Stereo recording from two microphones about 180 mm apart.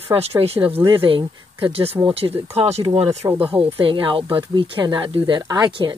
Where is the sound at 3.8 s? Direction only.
30° right (ahead or behind).